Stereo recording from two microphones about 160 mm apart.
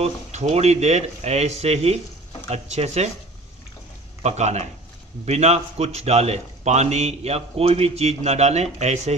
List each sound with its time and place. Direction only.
0.0 s a man's voice: 45° right (ahead or behind)
4.2 s a man's voice: 45° right (ahead or behind)